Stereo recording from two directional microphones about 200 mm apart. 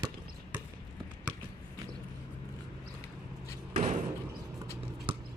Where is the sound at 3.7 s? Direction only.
30° right (ahead or behind).